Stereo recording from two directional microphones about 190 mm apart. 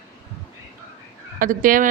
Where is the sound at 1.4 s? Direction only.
45° right (ahead or behind).